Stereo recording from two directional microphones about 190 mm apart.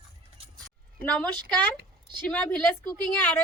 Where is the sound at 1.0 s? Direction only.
5° left (ahead or behind).